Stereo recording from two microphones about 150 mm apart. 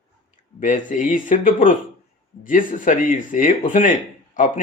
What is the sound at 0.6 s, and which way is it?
Speech, 60° left (ahead or behind).